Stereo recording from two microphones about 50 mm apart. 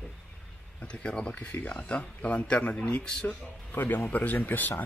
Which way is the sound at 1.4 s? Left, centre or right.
Left.